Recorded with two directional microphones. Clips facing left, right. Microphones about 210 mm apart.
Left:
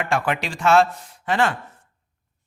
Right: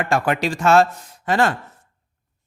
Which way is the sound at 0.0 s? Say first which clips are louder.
Right 3 dB; 40° right (ahead or behind).